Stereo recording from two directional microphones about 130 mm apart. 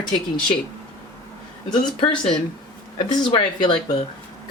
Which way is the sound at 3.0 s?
40° left (ahead or behind).